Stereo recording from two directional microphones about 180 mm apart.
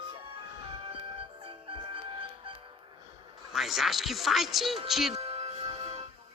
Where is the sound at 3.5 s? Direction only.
Centre (ahead or behind).